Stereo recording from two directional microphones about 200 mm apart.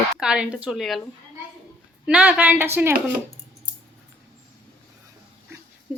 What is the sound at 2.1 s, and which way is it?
Speech, 5° right (ahead or behind).